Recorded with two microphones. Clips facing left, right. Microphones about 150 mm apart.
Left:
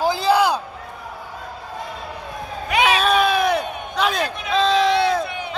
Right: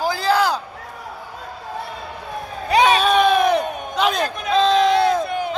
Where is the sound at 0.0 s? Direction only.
20° left (ahead or behind).